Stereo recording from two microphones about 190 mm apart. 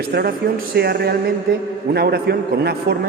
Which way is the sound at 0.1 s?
50° right (ahead or behind).